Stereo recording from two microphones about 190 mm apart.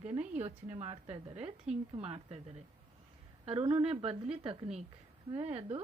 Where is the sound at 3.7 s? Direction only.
30° right (ahead or behind).